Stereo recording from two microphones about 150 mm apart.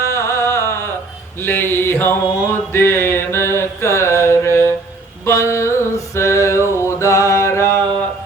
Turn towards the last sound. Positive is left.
turn(degrees=15)  # may be behind; listen again after turning